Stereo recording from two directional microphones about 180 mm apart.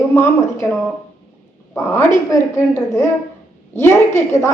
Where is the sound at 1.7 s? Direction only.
10° left (ahead or behind).